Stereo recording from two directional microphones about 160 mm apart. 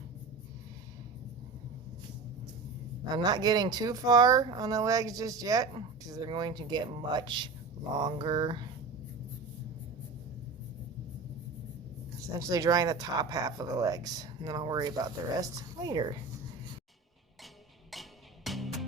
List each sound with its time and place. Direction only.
3.2 s speech: 25° right (ahead or behind)
12.4 s speech: 20° right (ahead or behind)
17.9 s music: centre (ahead or behind)